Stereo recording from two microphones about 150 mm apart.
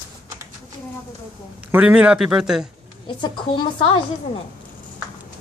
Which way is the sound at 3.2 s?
35° left (ahead or behind).